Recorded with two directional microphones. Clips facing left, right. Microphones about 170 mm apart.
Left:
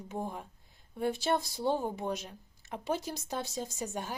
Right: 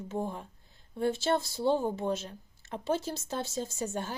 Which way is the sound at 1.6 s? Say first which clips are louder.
Right 4 dB; 10° left (ahead or behind).